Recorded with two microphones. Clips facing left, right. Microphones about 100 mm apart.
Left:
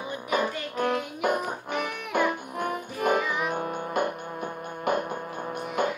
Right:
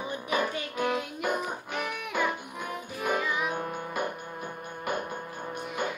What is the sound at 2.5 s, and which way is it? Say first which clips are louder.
Music: left 6 dB; 50° left (ahead or behind).